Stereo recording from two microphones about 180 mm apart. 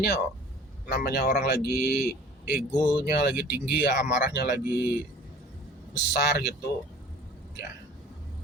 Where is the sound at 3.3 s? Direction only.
10° right (ahead or behind).